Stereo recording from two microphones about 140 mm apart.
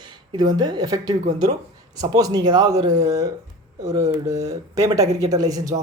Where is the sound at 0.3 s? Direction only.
30° right (ahead or behind).